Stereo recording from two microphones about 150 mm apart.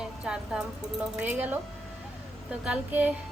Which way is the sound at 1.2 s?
10° right (ahead or behind).